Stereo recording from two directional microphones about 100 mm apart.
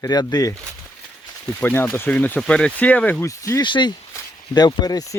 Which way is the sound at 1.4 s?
20° left (ahead or behind).